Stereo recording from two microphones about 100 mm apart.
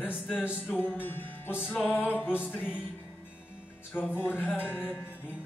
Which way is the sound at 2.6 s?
10° right (ahead or behind).